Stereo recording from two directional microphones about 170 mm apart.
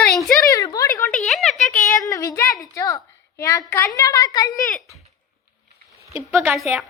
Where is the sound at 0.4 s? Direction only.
20° left (ahead or behind).